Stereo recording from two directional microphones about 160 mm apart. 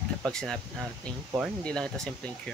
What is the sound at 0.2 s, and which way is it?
Speech, 5° left (ahead or behind).